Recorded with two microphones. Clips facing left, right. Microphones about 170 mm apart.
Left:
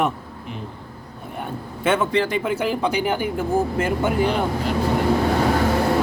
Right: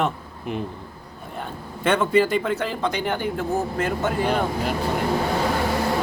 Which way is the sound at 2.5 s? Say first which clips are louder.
Left 3 dB; 10° left (ahead or behind).